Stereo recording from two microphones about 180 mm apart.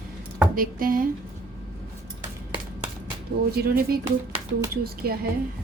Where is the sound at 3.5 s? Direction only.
55° right (ahead or behind).